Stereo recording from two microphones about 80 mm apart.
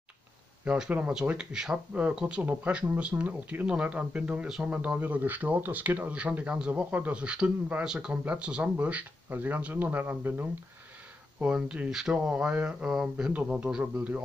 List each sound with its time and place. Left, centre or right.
0.7 s speech: centre
11.3 s speech: centre